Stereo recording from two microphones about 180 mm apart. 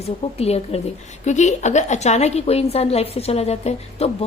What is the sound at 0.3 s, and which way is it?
A woman's voice, 35° left (ahead or behind).